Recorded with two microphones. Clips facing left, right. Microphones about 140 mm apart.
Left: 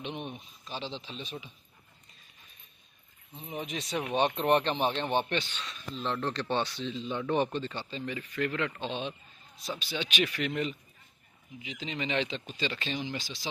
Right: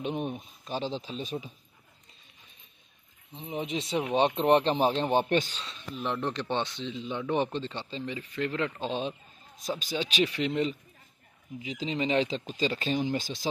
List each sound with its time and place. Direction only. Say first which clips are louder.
0.0 s speech: right 6 dB; 40° right (ahead or behind)
3.3 s speech: right 4 dB; 25° right (ahead or behind)
5.9 s a man's voice: right 1 dB; 15° right (ahead or behind)
7.5 s speech: right 1 dB; 25° right (ahead or behind); by 13.5 s 45° right (ahead or behind)